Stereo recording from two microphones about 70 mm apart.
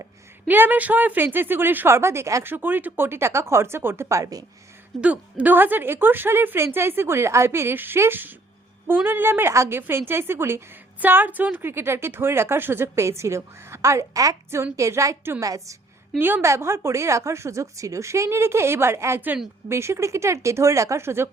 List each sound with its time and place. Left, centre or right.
0.4 s speech: right
2.4 s speech: right
4.2 s speech: right
4.9 s speech: centre; by 15.7 s right
16.1 s speech: right
16.4 s speech: right